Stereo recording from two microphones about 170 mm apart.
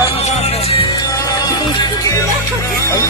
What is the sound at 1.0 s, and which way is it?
Music, 20° left (ahead or behind).